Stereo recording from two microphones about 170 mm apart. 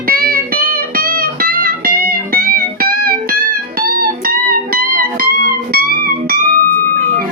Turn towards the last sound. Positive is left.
turn(degrees=-60)  # may be behind; listen again after turning